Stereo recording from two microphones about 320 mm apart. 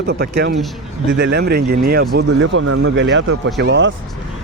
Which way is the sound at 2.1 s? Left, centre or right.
Right.